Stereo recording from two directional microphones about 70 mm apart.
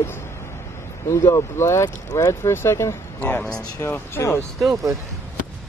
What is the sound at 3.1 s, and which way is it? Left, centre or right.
Speech, left.